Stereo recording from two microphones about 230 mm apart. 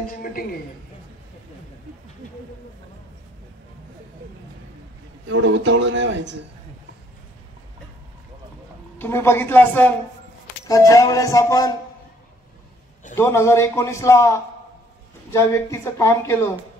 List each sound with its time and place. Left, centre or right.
0.1 s a woman's voice: left
5.3 s speech: right
8.9 s a man's voice: centre
13.1 s a man's voice: centre